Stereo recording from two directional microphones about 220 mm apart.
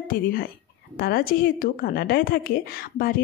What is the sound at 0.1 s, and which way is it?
Speech, 40° left (ahead or behind).